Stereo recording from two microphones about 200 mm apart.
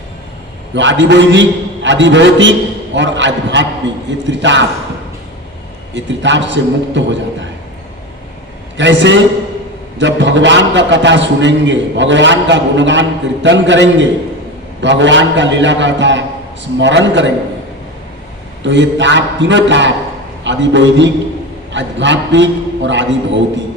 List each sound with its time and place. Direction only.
0.7 s a man's voice: 65° right (ahead or behind)
5.9 s a man's voice: 65° right (ahead or behind)
8.8 s a man's voice: 65° right (ahead or behind)
18.6 s a man's voice: 65° right (ahead or behind)